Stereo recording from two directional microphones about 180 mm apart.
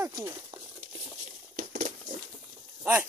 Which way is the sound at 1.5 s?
50° right (ahead or behind).